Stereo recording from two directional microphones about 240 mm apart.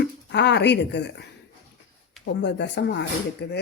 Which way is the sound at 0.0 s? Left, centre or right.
Left.